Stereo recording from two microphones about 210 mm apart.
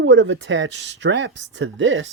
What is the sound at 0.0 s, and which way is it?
Speech, 65° right (ahead or behind).